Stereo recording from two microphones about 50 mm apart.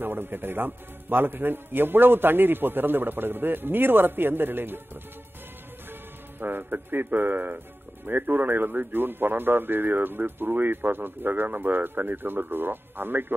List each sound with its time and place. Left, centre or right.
0.0 s a man's voice: right
6.4 s a man's voice: right